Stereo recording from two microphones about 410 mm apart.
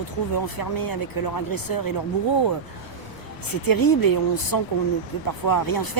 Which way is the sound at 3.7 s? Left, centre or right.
Left.